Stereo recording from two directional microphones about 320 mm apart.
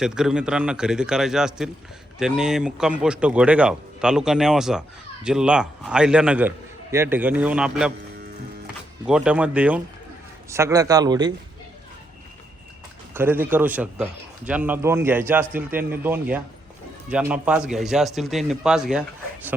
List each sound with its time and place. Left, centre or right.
0.0 s a man's voice: centre
9.0 s a man's voice: centre
13.1 s a man's voice: centre